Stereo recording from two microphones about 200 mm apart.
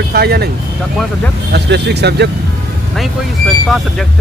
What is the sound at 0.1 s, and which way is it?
Speech, 55° right (ahead or behind).